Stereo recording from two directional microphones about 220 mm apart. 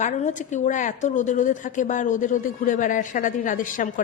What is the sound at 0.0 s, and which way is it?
A woman's voice, 35° left (ahead or behind).